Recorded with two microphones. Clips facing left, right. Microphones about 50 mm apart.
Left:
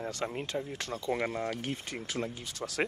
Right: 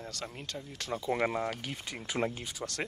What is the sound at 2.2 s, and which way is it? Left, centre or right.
Speech, right.